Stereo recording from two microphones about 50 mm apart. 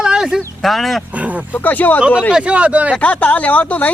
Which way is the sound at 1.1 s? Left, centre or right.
Right.